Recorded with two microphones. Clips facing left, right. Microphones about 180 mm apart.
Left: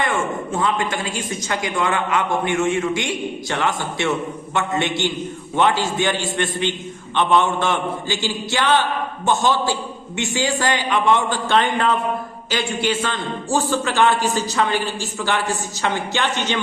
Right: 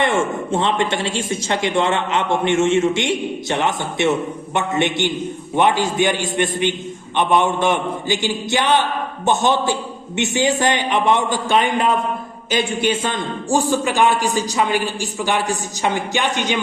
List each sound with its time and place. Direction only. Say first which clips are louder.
0.0 s a man's voice: right 3 dB; 25° right (ahead or behind)